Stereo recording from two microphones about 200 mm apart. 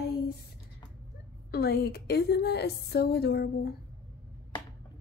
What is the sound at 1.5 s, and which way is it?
A woman's voice, 50° left (ahead or behind).